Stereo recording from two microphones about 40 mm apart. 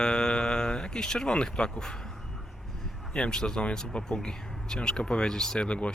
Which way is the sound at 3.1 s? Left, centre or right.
Left.